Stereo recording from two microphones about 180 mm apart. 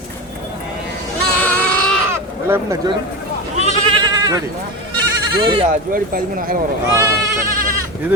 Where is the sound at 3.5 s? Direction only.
40° right (ahead or behind).